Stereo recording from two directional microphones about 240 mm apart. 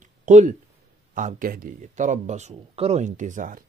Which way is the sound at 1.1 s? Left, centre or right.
Right.